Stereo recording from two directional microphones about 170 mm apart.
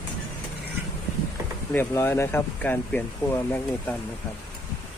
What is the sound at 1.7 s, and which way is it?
Speech, 15° left (ahead or behind).